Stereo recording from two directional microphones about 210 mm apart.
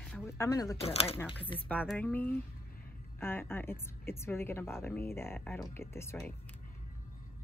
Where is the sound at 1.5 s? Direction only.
5° left (ahead or behind).